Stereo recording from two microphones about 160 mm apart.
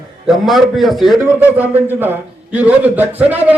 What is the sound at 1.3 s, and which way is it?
A man's voice, 10° right (ahead or behind).